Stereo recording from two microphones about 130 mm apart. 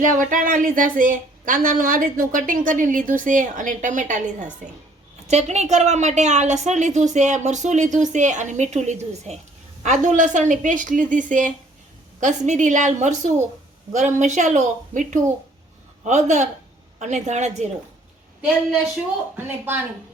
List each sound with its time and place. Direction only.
0.0 s a woman's voice: 90° right; by 4.4 s 75° right (ahead or behind)
5.3 s a woman's voice: 60° right (ahead or behind); by 11.5 s 80° right
12.2 s a woman's voice: 70° right (ahead or behind)
19.5 s speech: 15° right (ahead or behind)